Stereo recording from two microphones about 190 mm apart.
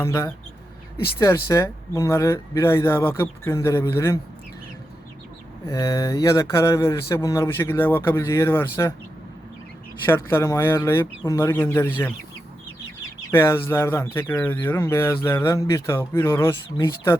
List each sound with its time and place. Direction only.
0.0 s speech: 15° left (ahead or behind)
5.6 s speech: 15° left (ahead or behind)
10.1 s speech: 10° left (ahead or behind)
13.3 s speech: 10° left (ahead or behind)